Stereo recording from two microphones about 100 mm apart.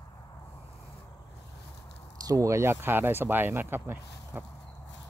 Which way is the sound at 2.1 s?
35° right (ahead or behind).